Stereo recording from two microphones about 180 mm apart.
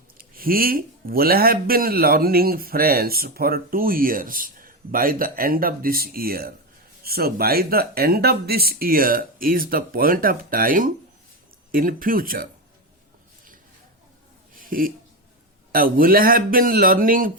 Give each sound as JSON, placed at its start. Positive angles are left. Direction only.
{"t": 0.2, "sound": "a man's voice", "side_deg": -55}
{"t": 14.5, "sound": "a sound", "side_deg": -50}
{"t": 15.7, "sound": "speech", "side_deg": -50}